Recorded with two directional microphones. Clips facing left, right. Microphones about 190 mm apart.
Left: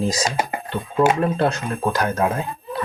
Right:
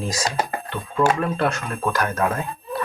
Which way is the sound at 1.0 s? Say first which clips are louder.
Left 2 dB; 20° left (ahead or behind).